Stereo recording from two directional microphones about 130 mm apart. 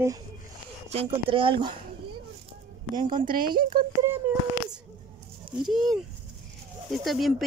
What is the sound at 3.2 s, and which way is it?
Speech, 90° right.